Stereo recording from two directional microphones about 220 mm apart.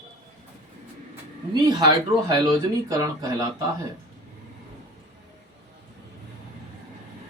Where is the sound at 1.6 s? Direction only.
15° right (ahead or behind).